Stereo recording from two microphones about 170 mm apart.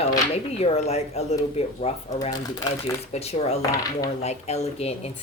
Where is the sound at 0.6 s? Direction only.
40° left (ahead or behind).